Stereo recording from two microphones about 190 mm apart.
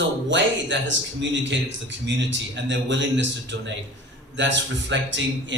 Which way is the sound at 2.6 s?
70° right (ahead or behind).